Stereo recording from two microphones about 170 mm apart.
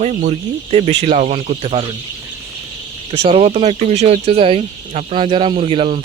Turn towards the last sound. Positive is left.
turn(degrees=-35)  # may be behind; listen again after turning